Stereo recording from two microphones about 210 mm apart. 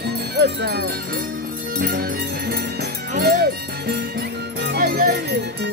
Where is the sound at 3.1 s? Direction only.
45° right (ahead or behind).